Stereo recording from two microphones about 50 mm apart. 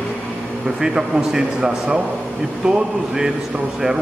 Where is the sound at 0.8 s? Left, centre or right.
Centre.